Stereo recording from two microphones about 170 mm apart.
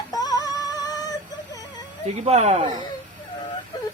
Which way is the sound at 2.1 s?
40° right (ahead or behind).